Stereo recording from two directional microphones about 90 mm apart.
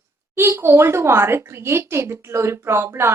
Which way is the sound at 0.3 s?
30° right (ahead or behind).